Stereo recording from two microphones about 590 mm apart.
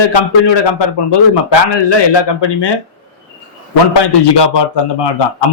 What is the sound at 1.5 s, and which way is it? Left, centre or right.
A man's voice, left.